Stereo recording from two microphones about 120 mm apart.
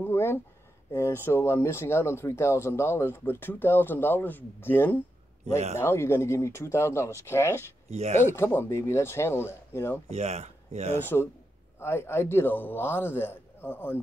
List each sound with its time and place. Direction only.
0.0 s a sound: 20° left (ahead or behind)
0.9 s speech: 20° left (ahead or behind)
7.9 s speech: 70° right (ahead or behind)
8.4 s speech: 20° left (ahead or behind)
10.0 s speech: 65° right (ahead or behind)
11.8 s a man's voice: 20° left (ahead or behind)